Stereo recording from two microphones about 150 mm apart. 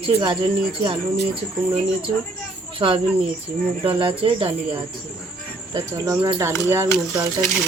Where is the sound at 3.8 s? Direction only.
35° right (ahead or behind).